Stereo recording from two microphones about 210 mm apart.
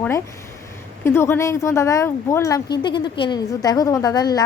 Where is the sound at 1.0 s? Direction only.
10° left (ahead or behind).